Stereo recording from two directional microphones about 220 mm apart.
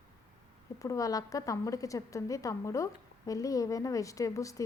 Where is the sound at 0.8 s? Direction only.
15° left (ahead or behind).